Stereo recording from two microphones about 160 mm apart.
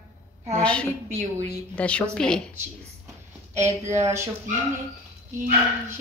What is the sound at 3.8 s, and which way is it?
Speech, 45° right (ahead or behind).